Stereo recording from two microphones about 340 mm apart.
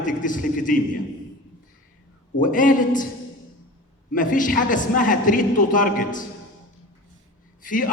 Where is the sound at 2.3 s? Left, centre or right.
Left.